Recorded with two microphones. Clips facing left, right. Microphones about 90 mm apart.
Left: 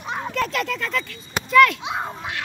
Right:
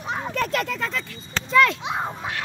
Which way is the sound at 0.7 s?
20° right (ahead or behind).